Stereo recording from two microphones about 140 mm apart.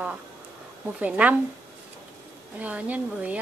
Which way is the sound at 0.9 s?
10° right (ahead or behind).